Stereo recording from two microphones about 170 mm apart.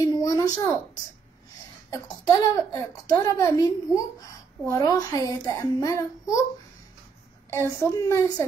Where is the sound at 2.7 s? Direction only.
20° left (ahead or behind).